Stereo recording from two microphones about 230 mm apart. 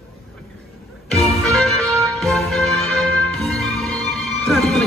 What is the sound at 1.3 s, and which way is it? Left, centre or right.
Music, centre.